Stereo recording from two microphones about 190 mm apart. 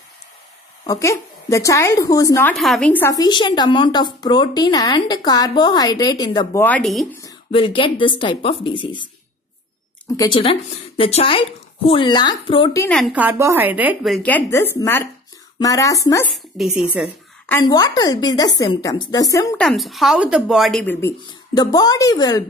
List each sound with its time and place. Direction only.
0.8 s a woman's voice: 15° left (ahead or behind)
2.5 s a woman's voice: centre (ahead or behind); by 6.6 s 20° left (ahead or behind)
6.6 s a woman's voice: 5° left (ahead or behind)
7.5 s a woman's voice: 25° left (ahead or behind)
10.0 s a woman's voice: 20° left (ahead or behind)
10.4 s a woman's voice: 30° left (ahead or behind)
12.9 s a woman's voice: 5° right (ahead or behind); by 16.3 s 15° left (ahead or behind)
16.5 s a woman's voice: 5° right (ahead or behind)
17.5 s a woman's voice: 20° left (ahead or behind)
19.5 s a woman's voice: 5° left (ahead or behind)
21.5 s a woman's voice: 20° left (ahead or behind)